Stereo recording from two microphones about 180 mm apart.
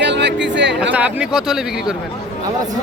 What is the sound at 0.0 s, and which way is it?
Music, 75° right (ahead or behind).